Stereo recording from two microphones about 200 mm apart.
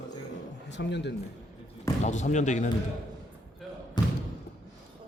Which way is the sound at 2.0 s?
35° left (ahead or behind).